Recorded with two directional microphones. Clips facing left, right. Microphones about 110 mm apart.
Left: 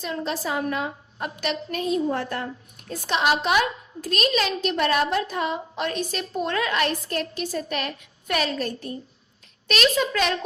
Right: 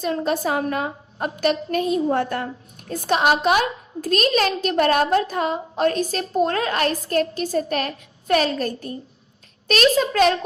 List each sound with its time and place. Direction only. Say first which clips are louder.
0.0 s a woman's voice: right 6 dB; 45° right (ahead or behind)